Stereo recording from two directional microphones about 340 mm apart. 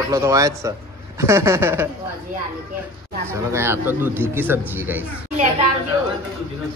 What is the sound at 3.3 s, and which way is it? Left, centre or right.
A man's voice, centre.